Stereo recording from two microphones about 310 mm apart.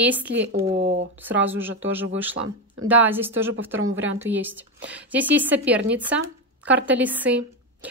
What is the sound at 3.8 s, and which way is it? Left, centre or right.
Speech, right.